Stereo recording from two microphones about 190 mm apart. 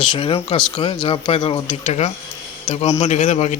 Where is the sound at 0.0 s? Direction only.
25° left (ahead or behind).